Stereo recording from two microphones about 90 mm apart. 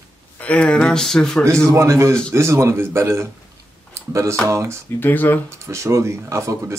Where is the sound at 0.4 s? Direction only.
15° left (ahead or behind).